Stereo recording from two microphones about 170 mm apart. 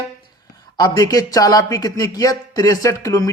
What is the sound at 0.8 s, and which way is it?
Speech, 20° left (ahead or behind).